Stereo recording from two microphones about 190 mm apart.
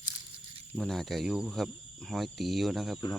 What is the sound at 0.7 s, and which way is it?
Speech, centre (ahead or behind).